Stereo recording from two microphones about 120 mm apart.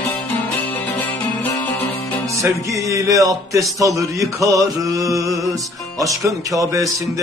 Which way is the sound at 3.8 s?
30° right (ahead or behind).